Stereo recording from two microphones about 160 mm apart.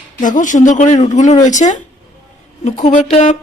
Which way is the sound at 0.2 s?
55° left (ahead or behind).